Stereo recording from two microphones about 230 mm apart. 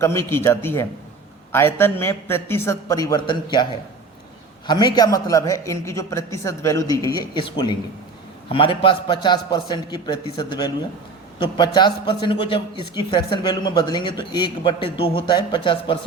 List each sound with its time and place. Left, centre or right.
0.0 s a man's voice: centre